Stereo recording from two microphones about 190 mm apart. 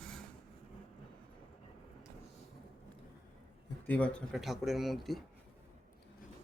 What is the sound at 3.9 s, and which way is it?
Speech, 5° left (ahead or behind).